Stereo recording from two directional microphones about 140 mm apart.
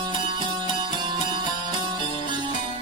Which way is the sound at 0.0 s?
35° right (ahead or behind).